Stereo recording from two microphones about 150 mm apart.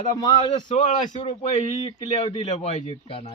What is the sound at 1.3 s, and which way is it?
A man's voice, 45° left (ahead or behind).